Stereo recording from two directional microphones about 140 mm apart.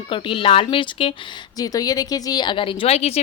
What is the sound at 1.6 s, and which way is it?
A woman's voice, 25° left (ahead or behind).